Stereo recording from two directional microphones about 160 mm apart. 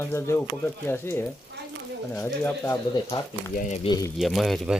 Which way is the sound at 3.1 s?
35° left (ahead or behind).